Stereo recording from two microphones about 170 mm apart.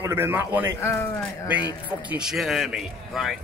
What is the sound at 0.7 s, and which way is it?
Speech, 15° left (ahead or behind).